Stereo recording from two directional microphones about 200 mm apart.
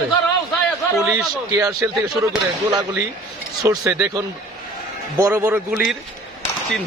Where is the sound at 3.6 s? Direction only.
15° right (ahead or behind).